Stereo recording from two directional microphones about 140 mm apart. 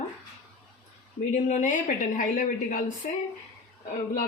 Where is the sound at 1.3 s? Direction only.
60° left (ahead or behind).